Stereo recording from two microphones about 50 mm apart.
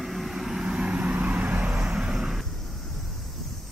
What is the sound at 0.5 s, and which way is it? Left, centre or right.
Vehicle, centre.